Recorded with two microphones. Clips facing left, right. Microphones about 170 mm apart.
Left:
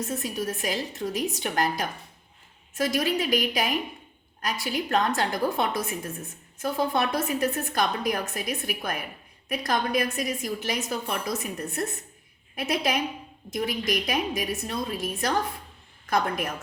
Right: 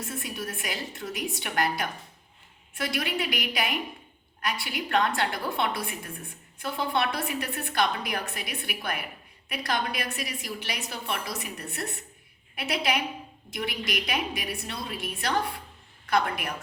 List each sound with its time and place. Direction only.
0.1 s a woman's voice: 40° left (ahead or behind)